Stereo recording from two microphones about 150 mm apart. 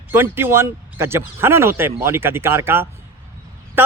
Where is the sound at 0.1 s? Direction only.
15° right (ahead or behind).